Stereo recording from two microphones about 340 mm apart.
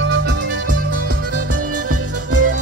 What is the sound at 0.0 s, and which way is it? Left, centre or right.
Music, right.